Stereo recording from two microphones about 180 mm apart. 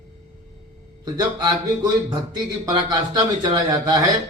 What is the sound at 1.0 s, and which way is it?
A man's voice, 25° right (ahead or behind).